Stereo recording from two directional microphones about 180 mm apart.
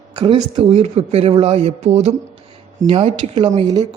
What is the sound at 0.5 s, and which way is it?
Speech, 35° right (ahead or behind).